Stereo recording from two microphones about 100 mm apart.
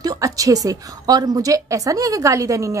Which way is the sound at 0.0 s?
40° right (ahead or behind).